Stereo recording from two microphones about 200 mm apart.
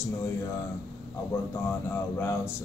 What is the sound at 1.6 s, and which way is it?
Speech, 10° left (ahead or behind).